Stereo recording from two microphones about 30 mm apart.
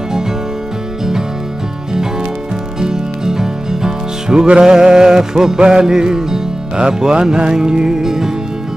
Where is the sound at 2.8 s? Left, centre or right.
Right.